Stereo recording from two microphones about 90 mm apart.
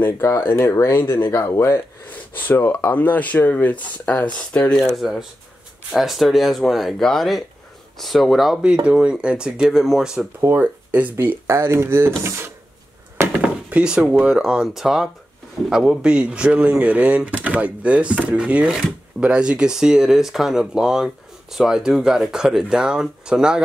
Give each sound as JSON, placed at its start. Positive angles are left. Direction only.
{"t": 0.0, "sound": "speech", "side_deg": 25}
{"t": 10.5, "sound": "speech", "side_deg": -20}
{"t": 13.4, "sound": "chop", "side_deg": -15}
{"t": 14.2, "sound": "speech", "side_deg": -5}